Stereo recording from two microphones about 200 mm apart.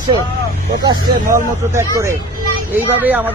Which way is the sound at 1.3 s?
15° right (ahead or behind).